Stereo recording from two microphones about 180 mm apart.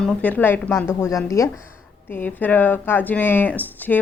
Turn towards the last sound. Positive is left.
turn(degrees=10)  # may be behind; listen again after turning